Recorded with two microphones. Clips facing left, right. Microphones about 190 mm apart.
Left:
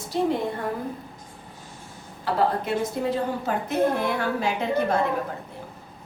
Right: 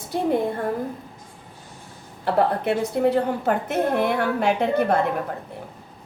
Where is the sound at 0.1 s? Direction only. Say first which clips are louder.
Even; 55° right (ahead or behind).